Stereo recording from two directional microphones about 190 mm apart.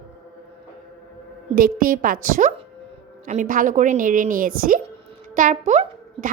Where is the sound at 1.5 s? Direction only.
50° right (ahead or behind).